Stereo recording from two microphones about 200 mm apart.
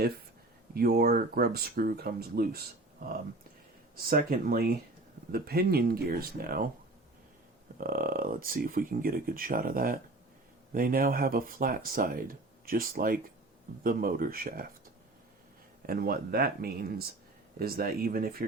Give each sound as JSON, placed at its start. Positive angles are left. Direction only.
{"t": 0.7, "sound": "speech", "side_deg": -50}
{"t": 7.8, "sound": "speech", "side_deg": -45}
{"t": 15.9, "sound": "speech", "side_deg": -50}